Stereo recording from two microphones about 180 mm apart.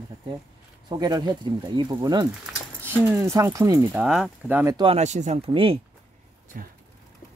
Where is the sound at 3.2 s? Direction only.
15° right (ahead or behind).